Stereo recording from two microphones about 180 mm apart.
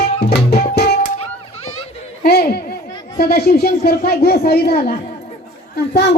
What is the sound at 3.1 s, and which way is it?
Speech, 60° left (ahead or behind).